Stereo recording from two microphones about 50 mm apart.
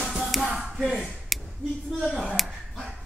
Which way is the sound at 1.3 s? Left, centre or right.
Centre.